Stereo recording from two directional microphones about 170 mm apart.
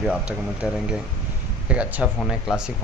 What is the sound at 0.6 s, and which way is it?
A man's voice, 5° right (ahead or behind).